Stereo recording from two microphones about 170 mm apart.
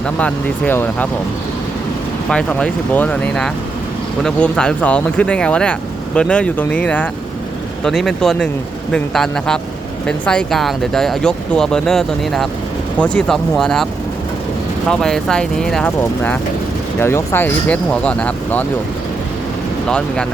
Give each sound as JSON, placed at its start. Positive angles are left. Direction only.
{"t": 0.2, "sound": "speech", "side_deg": 10}
{"t": 2.3, "sound": "speech", "side_deg": 5}
{"t": 14.8, "sound": "speech", "side_deg": 5}